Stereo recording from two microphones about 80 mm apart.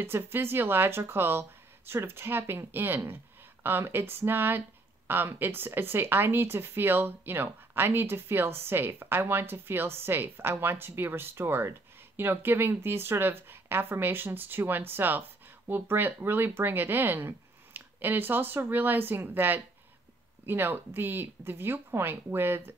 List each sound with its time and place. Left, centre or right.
0.0 s speech: right